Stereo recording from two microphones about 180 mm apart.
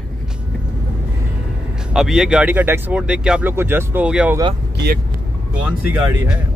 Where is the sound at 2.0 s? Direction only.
5° right (ahead or behind).